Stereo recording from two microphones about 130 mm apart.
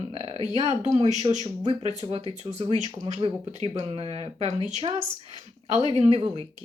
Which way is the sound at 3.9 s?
50° right (ahead or behind).